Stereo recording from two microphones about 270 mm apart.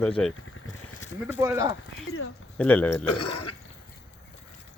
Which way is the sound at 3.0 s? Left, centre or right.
Left.